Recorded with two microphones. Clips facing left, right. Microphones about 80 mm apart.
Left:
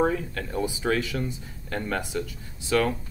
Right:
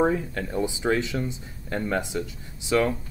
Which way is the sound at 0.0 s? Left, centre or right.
Right.